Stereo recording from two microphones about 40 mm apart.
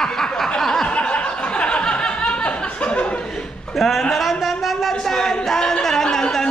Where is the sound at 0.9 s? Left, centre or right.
Left.